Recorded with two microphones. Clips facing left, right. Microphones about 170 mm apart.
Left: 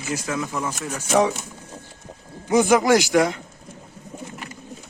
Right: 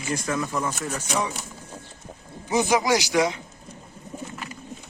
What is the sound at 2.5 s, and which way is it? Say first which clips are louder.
Speech: left 5 dB; 50° left (ahead or behind).